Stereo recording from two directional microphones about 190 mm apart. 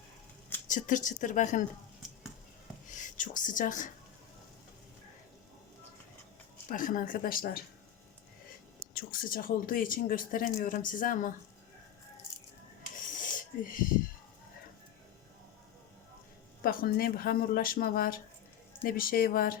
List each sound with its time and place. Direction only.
0.7 s speech: 40° left (ahead or behind)
2.9 s speech: 45° left (ahead or behind)
6.7 s speech: 45° left (ahead or behind)
9.0 s speech: 45° left (ahead or behind)
13.3 s wheeze: 45° left (ahead or behind)
16.6 s speech: 50° left (ahead or behind)